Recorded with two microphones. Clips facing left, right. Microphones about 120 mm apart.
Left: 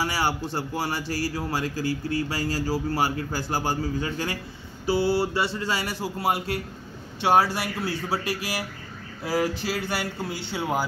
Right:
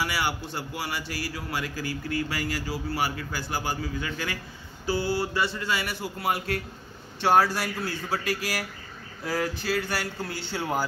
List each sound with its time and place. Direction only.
0.0 s a man's voice: 35° left (ahead or behind)
7.2 s speech: 15° left (ahead or behind)
10.5 s speech: 10° left (ahead or behind)